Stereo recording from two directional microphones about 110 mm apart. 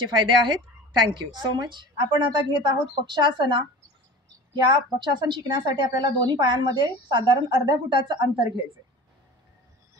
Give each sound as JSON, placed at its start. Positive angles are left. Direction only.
{"t": 0.1, "sound": "a woman's voice", "side_deg": -45}